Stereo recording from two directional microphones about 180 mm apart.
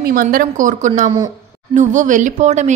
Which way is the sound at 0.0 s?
55° right (ahead or behind).